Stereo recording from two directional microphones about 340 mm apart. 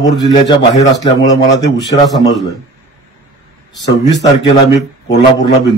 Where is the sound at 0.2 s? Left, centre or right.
Centre.